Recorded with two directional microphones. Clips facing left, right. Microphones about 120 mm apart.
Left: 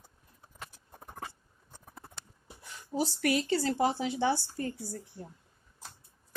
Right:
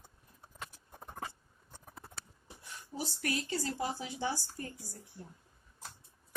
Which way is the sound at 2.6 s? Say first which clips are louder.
Left 9 dB; 90° left.